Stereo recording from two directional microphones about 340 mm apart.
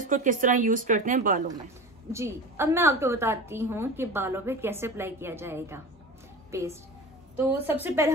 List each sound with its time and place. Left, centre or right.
0.0 s speech: right
2.1 s a woman's voice: centre